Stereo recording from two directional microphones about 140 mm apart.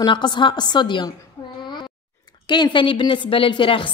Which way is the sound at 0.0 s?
30° left (ahead or behind).